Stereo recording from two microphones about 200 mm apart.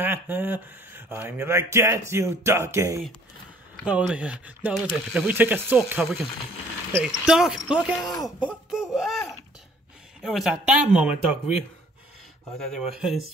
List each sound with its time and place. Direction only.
0.0 s speech: 10° right (ahead or behind)
8.0 s speech: 20° left (ahead or behind)
8.9 s speech: centre (ahead or behind)
12.5 s speech: centre (ahead or behind)